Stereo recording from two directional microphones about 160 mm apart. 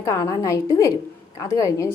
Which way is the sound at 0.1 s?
20° left (ahead or behind).